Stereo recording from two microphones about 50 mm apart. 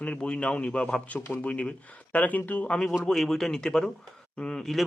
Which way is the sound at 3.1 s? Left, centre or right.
Centre.